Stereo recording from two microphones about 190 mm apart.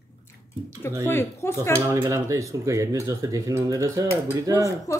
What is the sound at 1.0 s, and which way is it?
Speech, 15° left (ahead or behind).